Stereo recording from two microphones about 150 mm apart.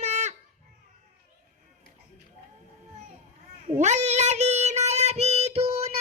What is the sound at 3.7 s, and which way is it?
Child singing, 50° right (ahead or behind).